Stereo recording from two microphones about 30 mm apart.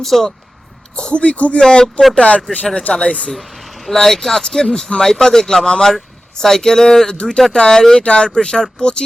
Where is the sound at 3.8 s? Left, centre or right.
Centre.